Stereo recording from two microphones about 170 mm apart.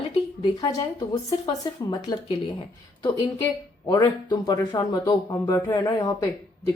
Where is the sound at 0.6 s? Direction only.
20° left (ahead or behind).